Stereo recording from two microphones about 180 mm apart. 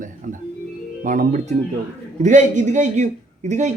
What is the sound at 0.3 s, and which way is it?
A man's voice, 45° right (ahead or behind).